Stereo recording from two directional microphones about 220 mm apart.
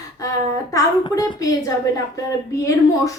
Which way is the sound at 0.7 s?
15° left (ahead or behind).